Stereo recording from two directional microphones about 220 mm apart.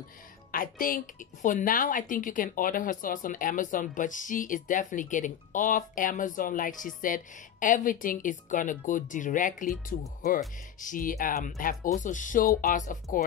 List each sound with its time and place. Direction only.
0.5 s a woman's voice: 40° left (ahead or behind)